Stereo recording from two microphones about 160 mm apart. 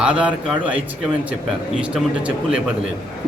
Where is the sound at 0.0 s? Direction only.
5° right (ahead or behind).